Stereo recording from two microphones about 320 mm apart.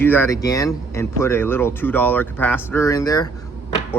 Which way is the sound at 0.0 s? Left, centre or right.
Centre.